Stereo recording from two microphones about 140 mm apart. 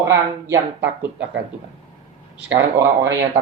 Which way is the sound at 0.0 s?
20° right (ahead or behind).